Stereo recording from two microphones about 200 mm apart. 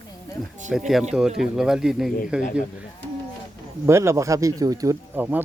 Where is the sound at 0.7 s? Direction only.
Centre (ahead or behind).